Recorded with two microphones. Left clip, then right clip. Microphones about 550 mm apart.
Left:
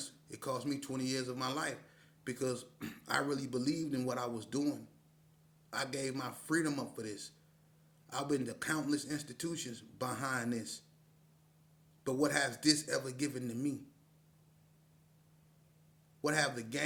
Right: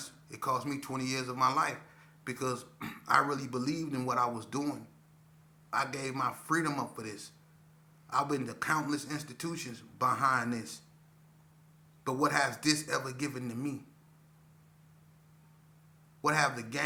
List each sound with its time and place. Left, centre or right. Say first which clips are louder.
0.0 s a man's voice: right 7 dB; left
12.0 s a man's voice: right 4 dB; left
16.2 s a man's voice: right 5 dB; left